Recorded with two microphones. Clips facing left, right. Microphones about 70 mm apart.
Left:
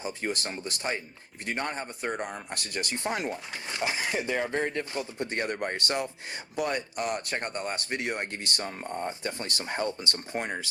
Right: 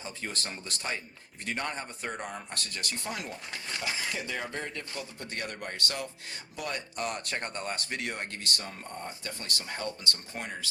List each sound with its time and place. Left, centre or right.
0.0 s a man's voice: left
4.4 s a man's voice: left